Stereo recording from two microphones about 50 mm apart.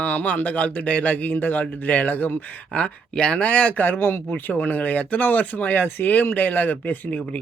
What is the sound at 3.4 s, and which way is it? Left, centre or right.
Speech, left.